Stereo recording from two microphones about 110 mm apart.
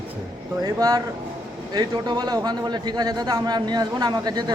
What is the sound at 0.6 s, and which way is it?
A man's voice, 35° right (ahead or behind).